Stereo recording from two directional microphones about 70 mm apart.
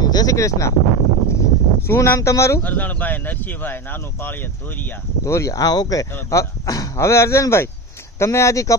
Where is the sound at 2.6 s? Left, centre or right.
Left.